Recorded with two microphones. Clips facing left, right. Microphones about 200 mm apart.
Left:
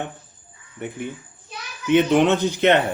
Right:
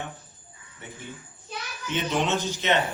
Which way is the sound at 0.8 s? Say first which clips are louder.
Left 11 dB; 60° left (ahead or behind).